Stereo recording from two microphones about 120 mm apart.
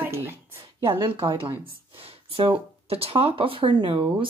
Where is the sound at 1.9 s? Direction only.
50° right (ahead or behind).